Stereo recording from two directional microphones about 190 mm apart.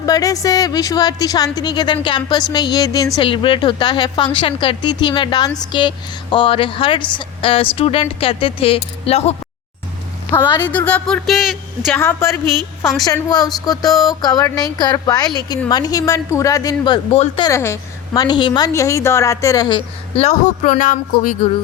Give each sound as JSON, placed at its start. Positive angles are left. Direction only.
{"t": 0.0, "sound": "a woman's voice", "side_deg": 20}
{"t": 10.3, "sound": "a woman's voice", "side_deg": 25}
{"t": 10.7, "sound": "speech", "side_deg": 10}
{"t": 11.9, "sound": "a woman's voice", "side_deg": 15}
{"t": 13.9, "sound": "speech", "side_deg": 0}
{"t": 14.2, "sound": "a woman's voice", "side_deg": 20}
{"t": 17.5, "sound": "a woman's voice", "side_deg": 15}